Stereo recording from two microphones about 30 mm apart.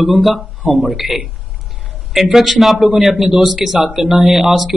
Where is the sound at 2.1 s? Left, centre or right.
Centre.